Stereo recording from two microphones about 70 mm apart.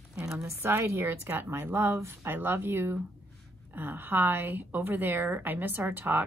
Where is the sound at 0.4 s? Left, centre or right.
Right.